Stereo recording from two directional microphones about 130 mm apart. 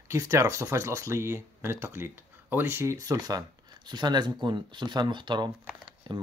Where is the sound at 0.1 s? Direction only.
20° right (ahead or behind).